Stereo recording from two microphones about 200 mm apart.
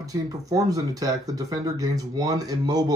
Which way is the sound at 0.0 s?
15° right (ahead or behind).